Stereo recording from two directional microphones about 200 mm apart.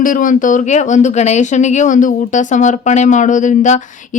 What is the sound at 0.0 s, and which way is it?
Speech, 40° left (ahead or behind).